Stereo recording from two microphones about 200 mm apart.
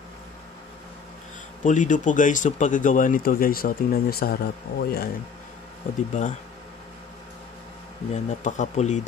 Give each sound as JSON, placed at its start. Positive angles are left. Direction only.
{"t": 1.6, "sound": "speech", "side_deg": 40}
{"t": 6.2, "sound": "speech", "side_deg": 40}
{"t": 8.1, "sound": "speech", "side_deg": 35}